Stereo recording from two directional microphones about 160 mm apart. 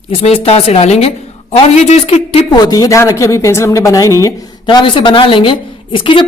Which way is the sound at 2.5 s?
25° left (ahead or behind).